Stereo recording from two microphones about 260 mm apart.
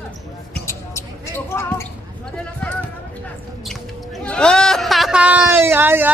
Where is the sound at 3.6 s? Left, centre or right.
Centre.